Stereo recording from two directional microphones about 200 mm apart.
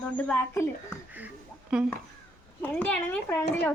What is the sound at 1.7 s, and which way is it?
Speech, 5° right (ahead or behind).